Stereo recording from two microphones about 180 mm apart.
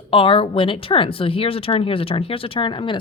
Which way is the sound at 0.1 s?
30° left (ahead or behind).